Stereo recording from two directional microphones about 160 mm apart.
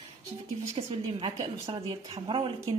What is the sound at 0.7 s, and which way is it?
A woman's voice, 35° right (ahead or behind).